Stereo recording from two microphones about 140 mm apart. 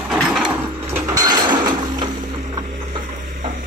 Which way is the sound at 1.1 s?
30° right (ahead or behind).